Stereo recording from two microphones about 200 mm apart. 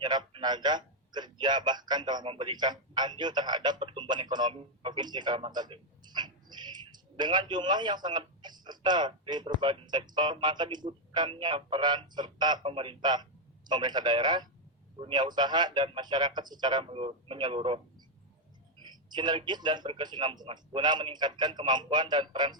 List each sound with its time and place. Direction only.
0.0 s a man's voice: 20° right (ahead or behind)
19.1 s a man's voice: 20° right (ahead or behind)